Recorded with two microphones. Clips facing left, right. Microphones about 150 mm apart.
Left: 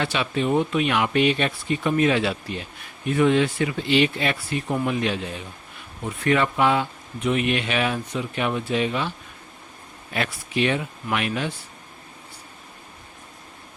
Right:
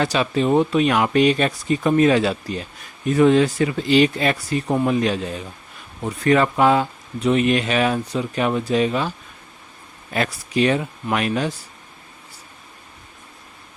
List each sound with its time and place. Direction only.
0.0 s speech: 40° right (ahead or behind)